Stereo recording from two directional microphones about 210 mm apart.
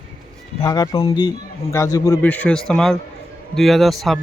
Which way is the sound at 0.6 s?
20° left (ahead or behind).